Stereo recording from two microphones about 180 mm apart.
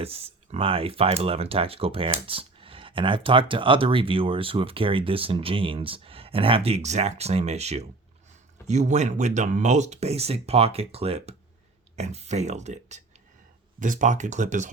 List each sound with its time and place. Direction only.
0.0 s speech: 35° right (ahead or behind)